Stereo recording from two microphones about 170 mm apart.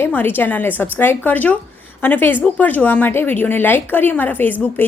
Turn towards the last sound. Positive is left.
turn(degrees=10)  # may be behind; listen again after turning